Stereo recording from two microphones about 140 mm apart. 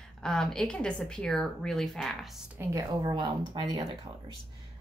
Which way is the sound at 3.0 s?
35° right (ahead or behind).